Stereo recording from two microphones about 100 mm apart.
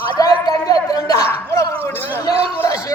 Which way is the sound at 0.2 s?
40° left (ahead or behind).